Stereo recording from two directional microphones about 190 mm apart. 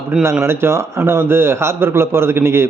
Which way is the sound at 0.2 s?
15° right (ahead or behind).